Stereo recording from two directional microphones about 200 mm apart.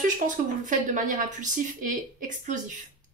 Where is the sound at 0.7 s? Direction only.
40° right (ahead or behind).